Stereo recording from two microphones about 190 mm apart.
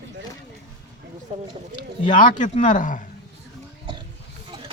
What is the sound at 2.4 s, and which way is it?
Speech, 40° left (ahead or behind).